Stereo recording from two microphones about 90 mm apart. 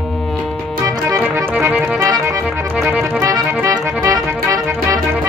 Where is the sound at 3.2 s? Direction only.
35° right (ahead or behind).